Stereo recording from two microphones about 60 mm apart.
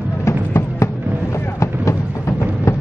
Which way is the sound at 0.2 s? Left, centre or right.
Left.